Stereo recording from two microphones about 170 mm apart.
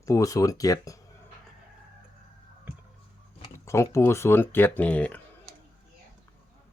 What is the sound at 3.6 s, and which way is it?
Speech, 15° left (ahead or behind).